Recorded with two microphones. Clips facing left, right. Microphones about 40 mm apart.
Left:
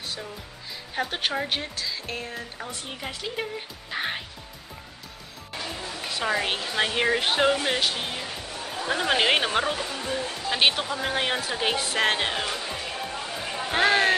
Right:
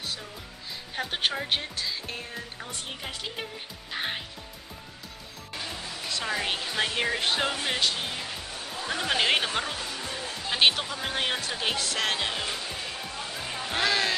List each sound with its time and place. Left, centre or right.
0.9 s a woman's voice: centre
5.5 s music: centre
5.9 s speech: centre
10.5 s speech: centre
13.4 s music: centre
13.7 s speech: left